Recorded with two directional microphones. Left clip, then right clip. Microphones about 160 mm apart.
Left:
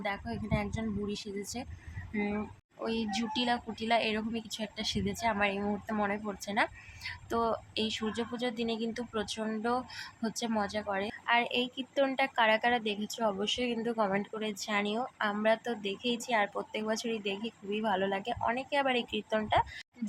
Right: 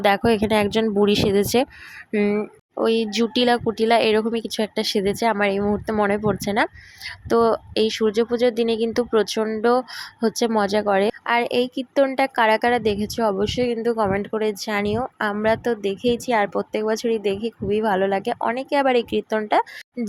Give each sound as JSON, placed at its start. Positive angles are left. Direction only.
{"t": 0.0, "sound": "speech", "side_deg": -60}
{"t": 2.1, "sound": "a woman's voice", "side_deg": -45}